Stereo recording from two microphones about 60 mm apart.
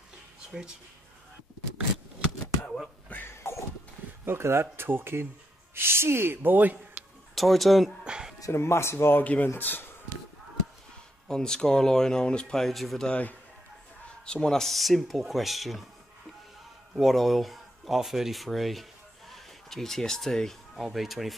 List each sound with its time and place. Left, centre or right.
0.5 s speech: centre
3.3 s a sound: left
4.3 s speech: right
7.3 s speech: centre
8.0 s a sound: centre
8.5 s speech: left
9.2 s speech: left
11.2 s speech: centre
12.6 s speech: centre
14.0 s speech: centre
16.9 s speech: centre